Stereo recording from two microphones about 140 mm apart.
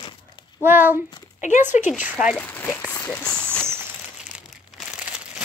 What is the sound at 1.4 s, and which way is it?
Speech, 60° left (ahead or behind).